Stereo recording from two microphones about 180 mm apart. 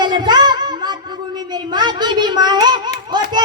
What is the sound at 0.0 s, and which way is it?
Music, 25° right (ahead or behind).